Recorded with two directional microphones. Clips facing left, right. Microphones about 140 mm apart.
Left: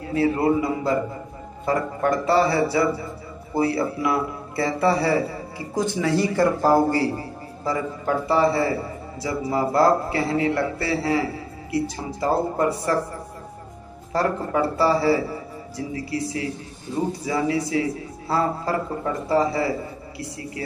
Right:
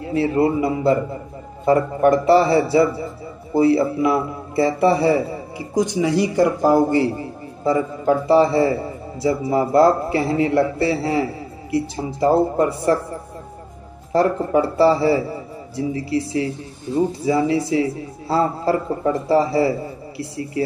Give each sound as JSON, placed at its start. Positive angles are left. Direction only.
{"t": 0.0, "sound": "a man's voice", "side_deg": -25}
{"t": 14.1, "sound": "a man's voice", "side_deg": -25}